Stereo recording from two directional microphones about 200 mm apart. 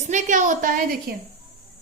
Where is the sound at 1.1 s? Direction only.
55° right (ahead or behind).